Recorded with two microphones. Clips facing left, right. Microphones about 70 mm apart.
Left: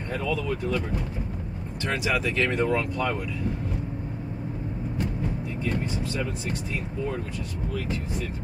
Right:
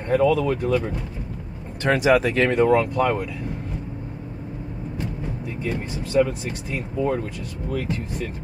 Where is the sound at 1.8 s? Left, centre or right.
Right.